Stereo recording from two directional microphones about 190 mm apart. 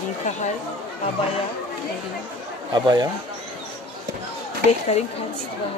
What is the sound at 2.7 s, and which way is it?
Speech, 20° right (ahead or behind).